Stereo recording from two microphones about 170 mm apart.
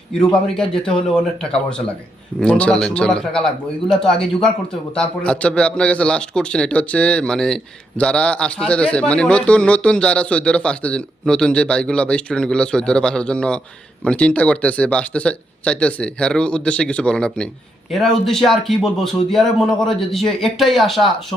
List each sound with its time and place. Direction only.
0.1 s speech: 5° left (ahead or behind)